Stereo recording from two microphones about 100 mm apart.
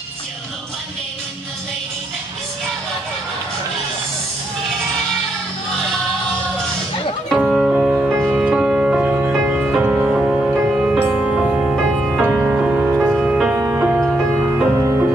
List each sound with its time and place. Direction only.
7.3 s music: 5° right (ahead or behind)
7.9 s music: 25° right (ahead or behind)
8.3 s music: 10° right (ahead or behind)
12.6 s music: 5° right (ahead or behind)
13.6 s music: 25° right (ahead or behind)
13.9 s music: 5° right (ahead or behind)
14.8 s music: 30° right (ahead or behind)